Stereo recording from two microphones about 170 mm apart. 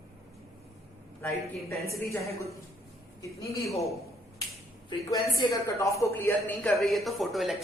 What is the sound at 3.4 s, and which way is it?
Speech, 20° left (ahead or behind).